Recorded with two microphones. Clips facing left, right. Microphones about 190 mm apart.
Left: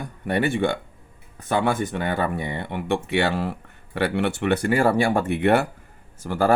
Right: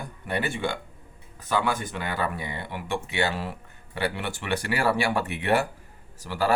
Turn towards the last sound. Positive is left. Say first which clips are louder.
# left 5 dB
turn(degrees=50)  # may be behind; listen again after turning